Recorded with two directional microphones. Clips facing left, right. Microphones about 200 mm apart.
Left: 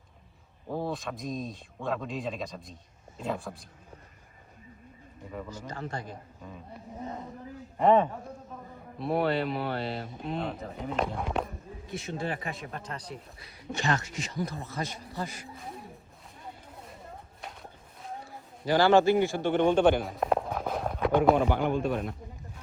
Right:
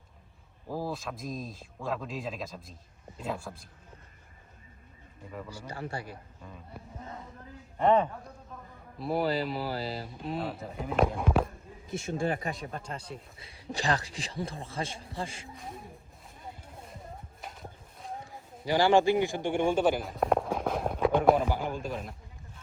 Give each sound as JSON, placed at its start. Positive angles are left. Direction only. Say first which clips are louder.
{"t": 0.7, "sound": "speech", "louder": "left 2 dB", "side_deg": 0}
{"t": 5.5, "sound": "a man's voice", "louder": "right 1 dB", "side_deg": -10}
{"t": 7.8, "sound": "speech", "louder": "left 2 dB", "side_deg": 0}
{"t": 12.1, "sound": "speech", "louder": "right 3 dB", "side_deg": -45}
{"t": 12.6, "sound": "speech", "louder": "even", "side_deg": -30}
{"t": 15.4, "sound": "speech", "louder": "left 1 dB", "side_deg": 0}
{"t": 17.4, "sound": "walk", "louder": "even", "side_deg": 0}
{"t": 18.3, "sound": "a man's voice", "louder": "left 3 dB", "side_deg": -15}
{"t": 21.5, "sound": "a man's voice", "louder": "left 5 dB", "side_deg": 60}
{"t": 21.8, "sound": "speech", "louder": "left 6 dB", "side_deg": 0}